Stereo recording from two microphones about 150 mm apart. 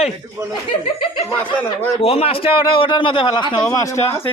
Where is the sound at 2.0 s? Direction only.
40° left (ahead or behind).